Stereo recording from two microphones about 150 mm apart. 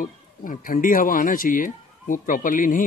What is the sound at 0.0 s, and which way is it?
Speech, 65° left (ahead or behind).